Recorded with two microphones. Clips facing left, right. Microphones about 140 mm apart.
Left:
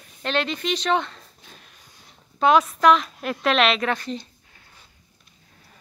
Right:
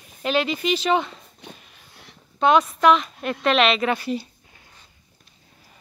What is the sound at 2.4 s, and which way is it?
A woman's voice, centre (ahead or behind).